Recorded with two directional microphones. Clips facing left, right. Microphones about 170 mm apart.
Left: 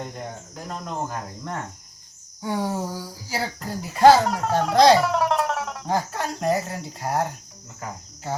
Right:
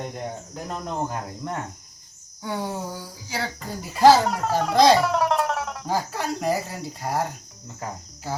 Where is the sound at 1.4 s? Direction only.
20° right (ahead or behind).